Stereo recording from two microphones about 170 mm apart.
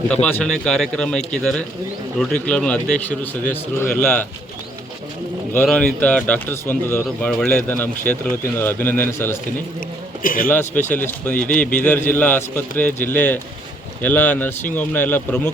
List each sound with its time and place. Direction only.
0.1 s speech: 5° left (ahead or behind)
5.5 s speech: 10° left (ahead or behind)
10.2 s speech: 55° left (ahead or behind)
10.5 s speech: 10° left (ahead or behind)